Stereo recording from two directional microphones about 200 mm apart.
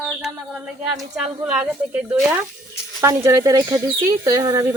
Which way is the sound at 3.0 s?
15° right (ahead or behind).